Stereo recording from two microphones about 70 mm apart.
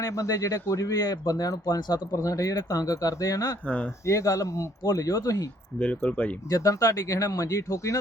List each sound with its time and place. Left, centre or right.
0.0 s speech: left
1.0 s speech: left
6.0 s speech: left
6.5 s speech: left